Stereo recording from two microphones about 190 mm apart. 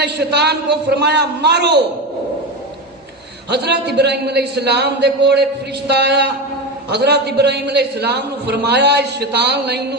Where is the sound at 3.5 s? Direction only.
60° right (ahead or behind).